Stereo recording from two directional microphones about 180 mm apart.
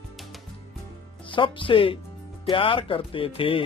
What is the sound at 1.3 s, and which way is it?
Speech, 30° left (ahead or behind).